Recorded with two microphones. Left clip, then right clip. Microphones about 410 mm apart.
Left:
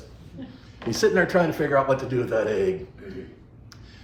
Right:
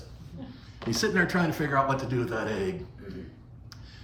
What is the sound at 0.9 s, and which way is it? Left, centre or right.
A man's voice, centre.